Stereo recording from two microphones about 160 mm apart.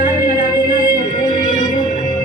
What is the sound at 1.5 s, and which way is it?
Music, 55° left (ahead or behind).